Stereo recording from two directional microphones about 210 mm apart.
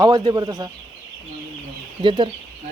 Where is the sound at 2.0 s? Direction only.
25° right (ahead or behind).